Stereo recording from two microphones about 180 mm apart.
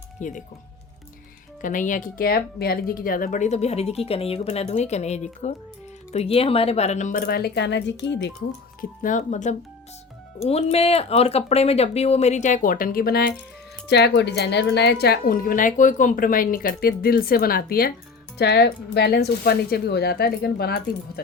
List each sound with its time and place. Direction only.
0.2 s speech: 45° left (ahead or behind)
1.6 s speech: 45° left (ahead or behind); by 8.3 s 75° left (ahead or behind)
8.4 s speech: 45° left (ahead or behind)
13.8 s speech: 70° left (ahead or behind)